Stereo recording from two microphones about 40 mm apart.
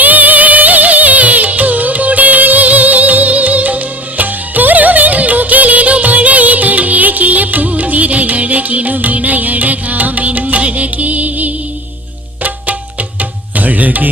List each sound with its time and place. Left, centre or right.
0.0 s music: right
12.4 s tabla: right